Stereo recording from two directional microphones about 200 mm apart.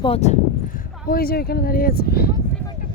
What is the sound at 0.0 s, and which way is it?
Speech, 30° left (ahead or behind).